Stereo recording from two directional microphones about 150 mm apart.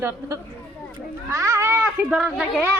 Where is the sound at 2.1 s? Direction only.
5° right (ahead or behind).